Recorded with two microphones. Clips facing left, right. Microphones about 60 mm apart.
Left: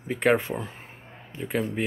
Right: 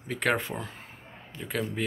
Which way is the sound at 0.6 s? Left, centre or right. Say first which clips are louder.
Left 2 dB; left.